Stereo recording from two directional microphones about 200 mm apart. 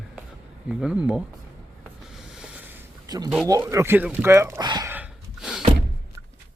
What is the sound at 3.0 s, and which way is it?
Speech, 20° right (ahead or behind).